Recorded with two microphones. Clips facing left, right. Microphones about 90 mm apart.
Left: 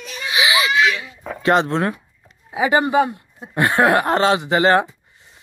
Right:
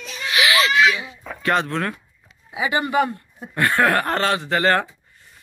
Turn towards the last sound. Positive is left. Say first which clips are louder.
# left 4 dB
turn(degrees=20)  # may be behind; listen again after turning